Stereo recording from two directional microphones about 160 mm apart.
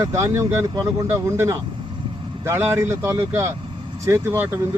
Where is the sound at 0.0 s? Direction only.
20° right (ahead or behind).